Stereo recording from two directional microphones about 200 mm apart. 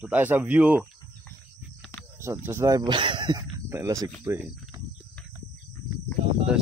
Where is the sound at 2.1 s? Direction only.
10° right (ahead or behind).